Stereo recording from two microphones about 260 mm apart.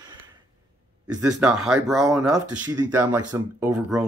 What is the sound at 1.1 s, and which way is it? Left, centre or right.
Speech, centre.